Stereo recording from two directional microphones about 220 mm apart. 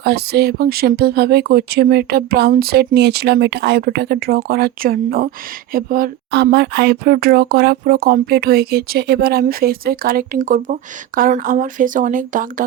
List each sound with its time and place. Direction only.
0.0 s speech: 45° right (ahead or behind)